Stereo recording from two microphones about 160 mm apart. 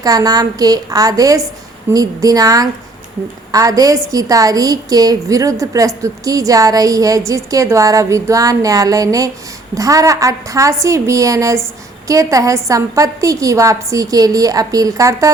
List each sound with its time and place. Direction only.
0.0 s a woman's voice: 25° right (ahead or behind)